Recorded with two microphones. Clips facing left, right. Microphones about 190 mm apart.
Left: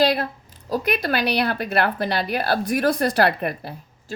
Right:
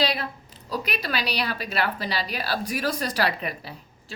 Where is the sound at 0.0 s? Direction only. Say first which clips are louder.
Left 6 dB; 50° left (ahead or behind).